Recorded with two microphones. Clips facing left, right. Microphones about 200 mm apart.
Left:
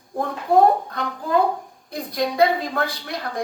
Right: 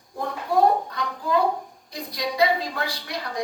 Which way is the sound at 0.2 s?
55° left (ahead or behind).